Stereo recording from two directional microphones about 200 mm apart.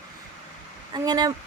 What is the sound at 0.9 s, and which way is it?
Speech, 20° right (ahead or behind).